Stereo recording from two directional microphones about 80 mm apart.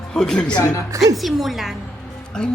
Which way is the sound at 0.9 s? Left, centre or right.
Right.